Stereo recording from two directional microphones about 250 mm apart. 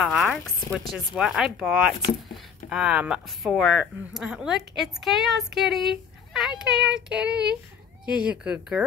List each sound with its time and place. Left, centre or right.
0.0 s speech: centre